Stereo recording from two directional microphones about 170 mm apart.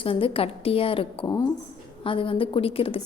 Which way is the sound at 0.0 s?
30° left (ahead or behind).